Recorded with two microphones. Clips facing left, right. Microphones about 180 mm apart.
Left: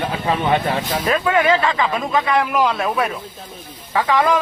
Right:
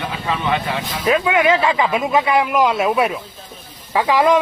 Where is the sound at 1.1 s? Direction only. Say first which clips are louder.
Right 2 dB; 15° right (ahead or behind).